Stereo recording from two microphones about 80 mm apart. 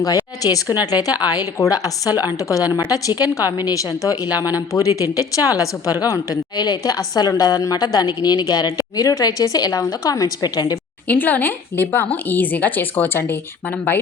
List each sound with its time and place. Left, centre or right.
0.4 s speech: left
1.5 s a woman's voice: left
11.1 s a woman's voice: left